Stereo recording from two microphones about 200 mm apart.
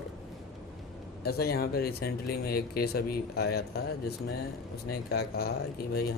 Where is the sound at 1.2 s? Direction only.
50° left (ahead or behind).